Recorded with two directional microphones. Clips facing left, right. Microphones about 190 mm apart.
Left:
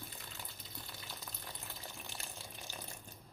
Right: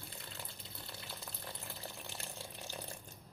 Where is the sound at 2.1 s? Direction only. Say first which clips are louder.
Right 2 dB; 35° right (ahead or behind).